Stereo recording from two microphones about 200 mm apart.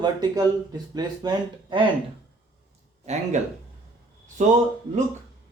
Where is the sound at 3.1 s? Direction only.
35° right (ahead or behind).